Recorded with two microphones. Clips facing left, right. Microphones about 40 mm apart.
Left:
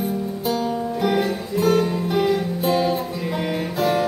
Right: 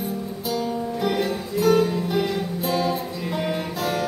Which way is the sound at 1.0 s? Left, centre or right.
Centre.